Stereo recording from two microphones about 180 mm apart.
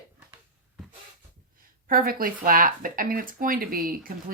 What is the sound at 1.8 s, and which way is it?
A woman's voice, 55° right (ahead or behind).